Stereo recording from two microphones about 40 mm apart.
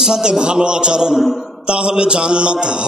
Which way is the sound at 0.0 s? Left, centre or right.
Centre.